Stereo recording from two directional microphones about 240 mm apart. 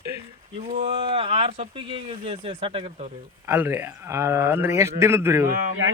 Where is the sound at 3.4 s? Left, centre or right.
Centre.